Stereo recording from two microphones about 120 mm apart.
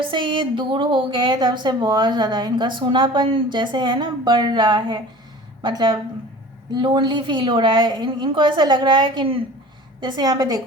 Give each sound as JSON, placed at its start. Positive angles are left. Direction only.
{"t": 0.0, "sound": "a woman's voice", "side_deg": -40}